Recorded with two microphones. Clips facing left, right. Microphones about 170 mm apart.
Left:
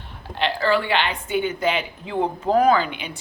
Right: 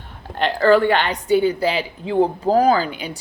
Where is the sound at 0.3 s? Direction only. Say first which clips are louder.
Right 6 dB; 45° right (ahead or behind).